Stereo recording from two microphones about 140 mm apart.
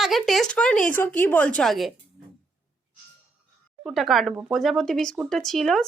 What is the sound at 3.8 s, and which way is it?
A woman's voice, centre (ahead or behind).